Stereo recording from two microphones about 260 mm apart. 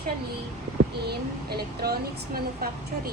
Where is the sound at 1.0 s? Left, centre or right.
Right.